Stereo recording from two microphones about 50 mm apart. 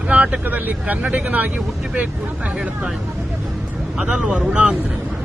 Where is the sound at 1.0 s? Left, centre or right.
Centre.